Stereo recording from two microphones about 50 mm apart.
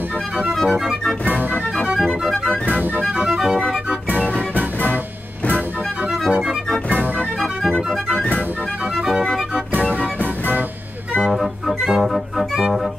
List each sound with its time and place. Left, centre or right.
0.6 s music: centre
1.2 s music: right
2.0 s music: centre
2.7 s music: right
3.3 s organ: centre
4.2 s music: right
6.9 s organ: right
7.3 s music: centre
9.8 s music: right
11.2 s music: centre